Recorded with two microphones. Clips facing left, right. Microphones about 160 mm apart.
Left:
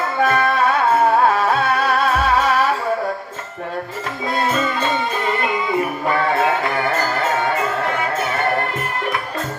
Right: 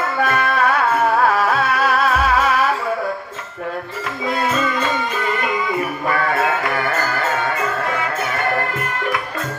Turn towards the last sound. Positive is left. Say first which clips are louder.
# left 2 dB
turn(degrees=25)  # may be behind; listen again after turning